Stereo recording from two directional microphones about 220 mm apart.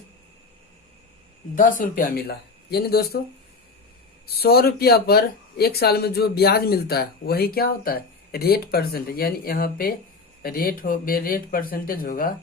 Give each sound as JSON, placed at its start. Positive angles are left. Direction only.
{"t": 2.0, "sound": "speech", "side_deg": 40}
{"t": 4.4, "sound": "speech", "side_deg": 45}